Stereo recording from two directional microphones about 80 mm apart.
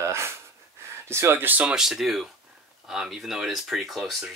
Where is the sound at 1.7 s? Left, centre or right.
Centre.